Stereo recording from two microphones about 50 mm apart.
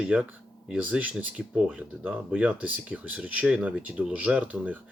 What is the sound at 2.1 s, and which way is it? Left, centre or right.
Speech, right.